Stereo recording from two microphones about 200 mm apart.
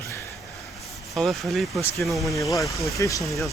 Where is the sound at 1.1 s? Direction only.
Centre (ahead or behind).